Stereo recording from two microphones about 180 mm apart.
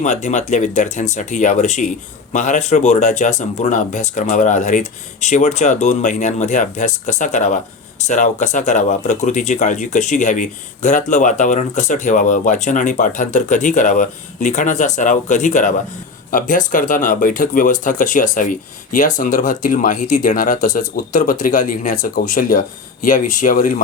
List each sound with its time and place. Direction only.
0.0 s speech: 40° left (ahead or behind)